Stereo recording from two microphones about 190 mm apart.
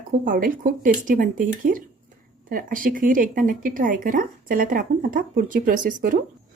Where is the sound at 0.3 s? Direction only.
45° right (ahead or behind).